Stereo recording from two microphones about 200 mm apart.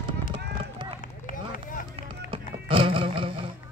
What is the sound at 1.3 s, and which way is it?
Run, 45° left (ahead or behind).